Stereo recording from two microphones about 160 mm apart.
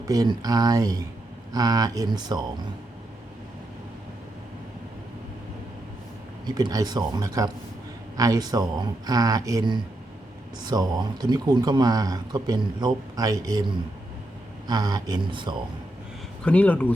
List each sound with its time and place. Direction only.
0.1 s speech: 25° right (ahead or behind)
6.4 s speech: 25° right (ahead or behind)
14.7 s speech: 25° right (ahead or behind)
16.4 s speech: 10° left (ahead or behind)